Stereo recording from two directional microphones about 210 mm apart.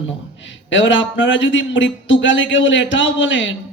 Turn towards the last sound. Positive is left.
turn(degrees=60)  # may be behind; listen again after turning